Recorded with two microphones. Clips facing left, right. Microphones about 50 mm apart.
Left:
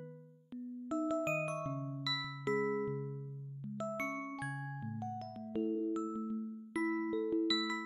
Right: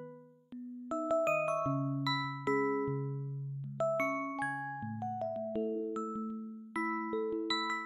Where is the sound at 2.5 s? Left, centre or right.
Right.